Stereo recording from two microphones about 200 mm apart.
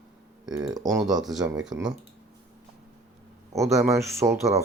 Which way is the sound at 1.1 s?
Centre (ahead or behind).